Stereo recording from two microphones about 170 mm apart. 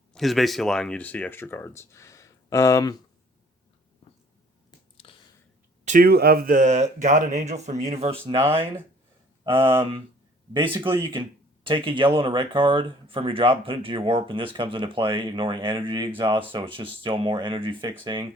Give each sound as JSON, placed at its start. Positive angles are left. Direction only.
{"t": 0.1, "sound": "speech", "side_deg": 0}
{"t": 5.0, "sound": "a sound", "side_deg": 35}
{"t": 5.8, "sound": "a sound", "side_deg": -45}
{"t": 6.1, "sound": "speech", "side_deg": -65}
{"t": 8.5, "sound": "speech", "side_deg": -15}
{"t": 11.6, "sound": "speech", "side_deg": -30}